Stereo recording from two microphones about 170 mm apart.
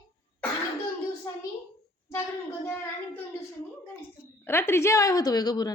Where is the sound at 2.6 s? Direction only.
10° left (ahead or behind).